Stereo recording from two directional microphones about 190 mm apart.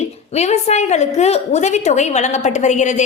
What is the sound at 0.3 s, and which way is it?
A woman's voice, 35° left (ahead or behind).